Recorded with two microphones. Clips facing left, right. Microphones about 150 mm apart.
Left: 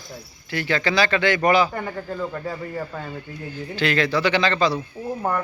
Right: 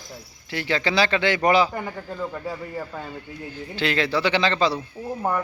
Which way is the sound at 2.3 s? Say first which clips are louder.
Left 2 dB; 10° right (ahead or behind).